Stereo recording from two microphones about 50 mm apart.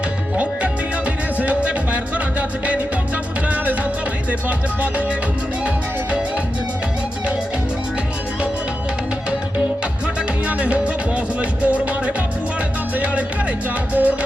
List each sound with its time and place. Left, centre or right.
0.3 s music: right
4.3 s music: right
10.4 s music: right
13.9 s music: right